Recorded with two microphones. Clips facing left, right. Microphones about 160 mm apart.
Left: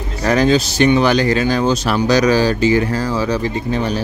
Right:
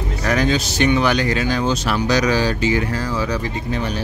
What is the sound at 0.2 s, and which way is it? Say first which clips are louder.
Speech: left 5 dB; 35° left (ahead or behind).